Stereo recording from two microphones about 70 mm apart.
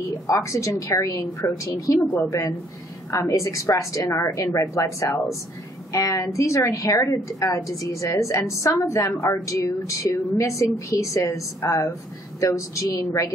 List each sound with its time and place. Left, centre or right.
0.3 s a woman's voice: left